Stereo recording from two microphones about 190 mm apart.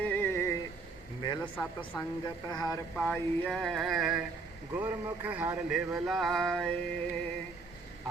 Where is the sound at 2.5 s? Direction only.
20° left (ahead or behind).